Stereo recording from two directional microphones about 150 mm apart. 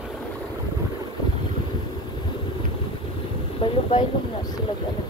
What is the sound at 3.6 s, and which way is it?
Speech, 40° left (ahead or behind).